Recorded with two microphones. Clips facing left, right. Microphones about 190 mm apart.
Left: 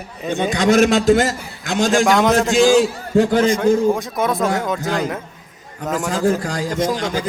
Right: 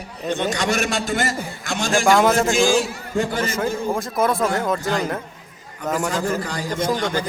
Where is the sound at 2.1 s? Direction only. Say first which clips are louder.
Left 1 dB; centre (ahead or behind).